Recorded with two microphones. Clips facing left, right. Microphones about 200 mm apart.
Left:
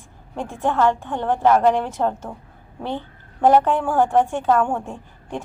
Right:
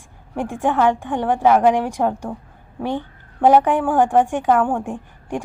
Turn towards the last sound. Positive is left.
turn(degrees=-15)  # may be behind; listen again after turning